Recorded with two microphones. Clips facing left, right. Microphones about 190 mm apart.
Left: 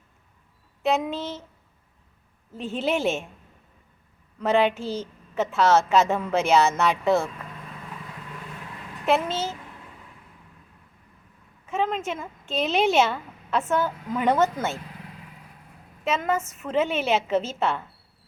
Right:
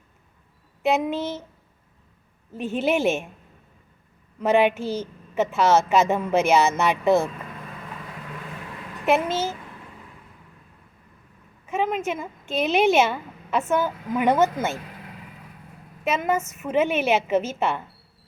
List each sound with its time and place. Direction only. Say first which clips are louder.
0.8 s speech: right 2 dB; 15° right (ahead or behind)
2.6 s speech: right 3 dB; 15° right (ahead or behind)
4.4 s speech: right 2 dB; 15° right (ahead or behind)
9.0 s speech: right 2 dB; 15° right (ahead or behind)
11.7 s speech: right 2 dB; 15° right (ahead or behind)
16.0 s speech: right 2 dB; 15° right (ahead or behind)